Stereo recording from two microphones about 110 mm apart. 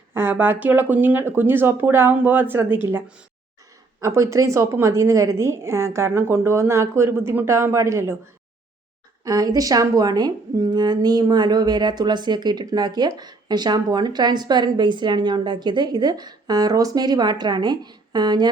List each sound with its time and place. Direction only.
0.1 s a woman's voice: 20° right (ahead or behind)
4.0 s a woman's voice: 25° right (ahead or behind)
9.2 s speech: 35° right (ahead or behind)